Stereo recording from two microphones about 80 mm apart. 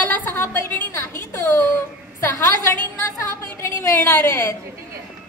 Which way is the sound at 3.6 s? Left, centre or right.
Left.